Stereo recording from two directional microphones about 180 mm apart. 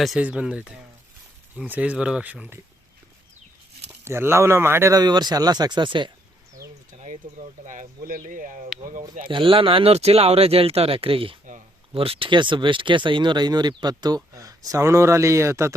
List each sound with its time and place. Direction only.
0.0 s a man's voice: 5° right (ahead or behind)
4.0 s speech: 15° right (ahead or behind)
7.7 s speech: 50° right (ahead or behind)
9.2 s a man's voice: 30° right (ahead or behind)